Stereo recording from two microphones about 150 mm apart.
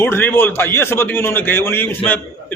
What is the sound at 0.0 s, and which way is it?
A man's voice, 15° left (ahead or behind).